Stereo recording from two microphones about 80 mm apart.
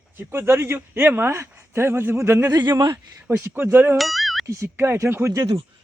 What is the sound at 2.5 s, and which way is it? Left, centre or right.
Speech, right.